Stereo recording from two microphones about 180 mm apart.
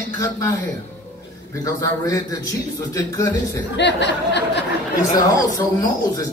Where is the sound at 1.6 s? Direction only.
20° left (ahead or behind).